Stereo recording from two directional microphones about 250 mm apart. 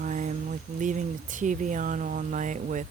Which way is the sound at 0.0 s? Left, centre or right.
Right.